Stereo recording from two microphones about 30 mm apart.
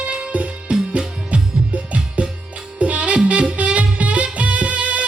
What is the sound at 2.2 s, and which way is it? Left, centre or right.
Music, right.